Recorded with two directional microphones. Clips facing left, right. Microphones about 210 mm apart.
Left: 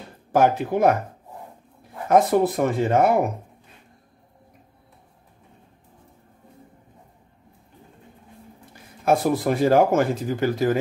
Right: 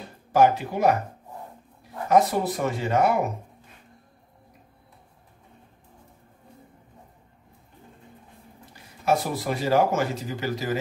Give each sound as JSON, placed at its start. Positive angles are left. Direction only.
{"t": 0.3, "sound": "speech", "side_deg": 50}
{"t": 2.0, "sound": "speech", "side_deg": 50}
{"t": 9.0, "sound": "speech", "side_deg": 55}